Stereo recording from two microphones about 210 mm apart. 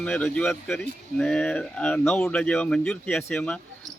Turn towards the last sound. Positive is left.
turn(degrees=5)  # may be behind; listen again after turning